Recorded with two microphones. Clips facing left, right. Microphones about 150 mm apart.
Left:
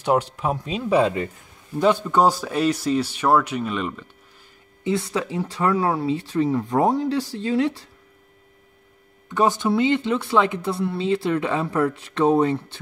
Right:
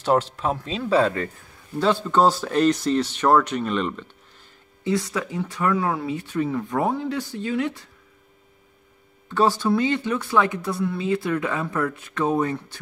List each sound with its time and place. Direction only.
0.0 s speech: 10° left (ahead or behind)
4.8 s speech: 25° left (ahead or behind)
9.3 s speech: 15° left (ahead or behind)